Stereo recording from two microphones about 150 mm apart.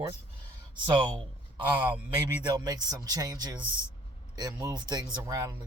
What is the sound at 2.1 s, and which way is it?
Speech, 25° right (ahead or behind).